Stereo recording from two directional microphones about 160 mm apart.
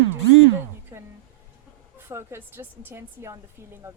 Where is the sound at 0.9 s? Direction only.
20° right (ahead or behind).